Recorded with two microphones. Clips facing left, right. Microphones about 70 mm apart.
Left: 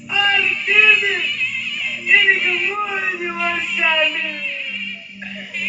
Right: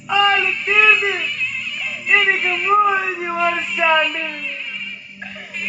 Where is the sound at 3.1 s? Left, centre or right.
Right.